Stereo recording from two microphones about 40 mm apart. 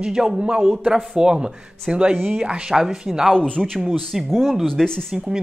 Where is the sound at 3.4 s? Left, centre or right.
Left.